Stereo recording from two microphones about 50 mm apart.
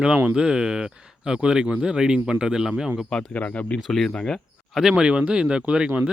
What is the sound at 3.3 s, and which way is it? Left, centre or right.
Speech, left.